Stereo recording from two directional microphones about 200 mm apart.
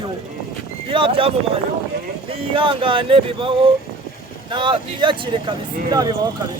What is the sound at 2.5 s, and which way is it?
Speech, 25° right (ahead or behind).